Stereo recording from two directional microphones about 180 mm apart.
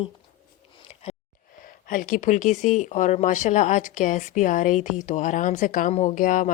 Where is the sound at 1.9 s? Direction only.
50° left (ahead or behind).